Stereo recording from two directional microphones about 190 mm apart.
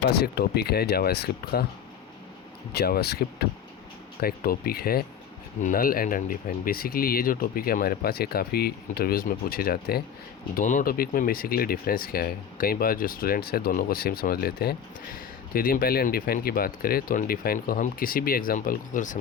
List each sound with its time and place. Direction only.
0.2 s speech: 55° left (ahead or behind)
2.7 s speech: 55° left (ahead or behind)
10.5 s speech: 40° left (ahead or behind)